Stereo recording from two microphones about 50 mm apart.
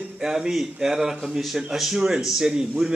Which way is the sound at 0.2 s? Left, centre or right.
Centre.